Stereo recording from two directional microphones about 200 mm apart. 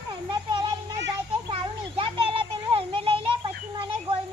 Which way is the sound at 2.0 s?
25° right (ahead or behind).